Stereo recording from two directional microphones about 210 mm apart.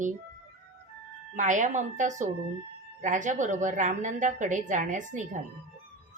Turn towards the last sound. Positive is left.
turn(degrees=-35)  # may be behind; listen again after turning